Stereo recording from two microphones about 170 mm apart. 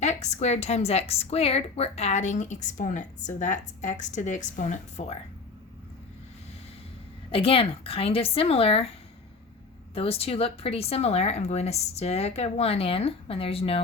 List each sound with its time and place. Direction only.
0.0 s a woman's voice: 40° left (ahead or behind)
7.3 s speech: 35° left (ahead or behind)
9.9 s speech: 35° left (ahead or behind)